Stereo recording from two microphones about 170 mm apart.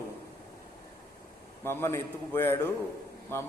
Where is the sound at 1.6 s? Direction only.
15° left (ahead or behind).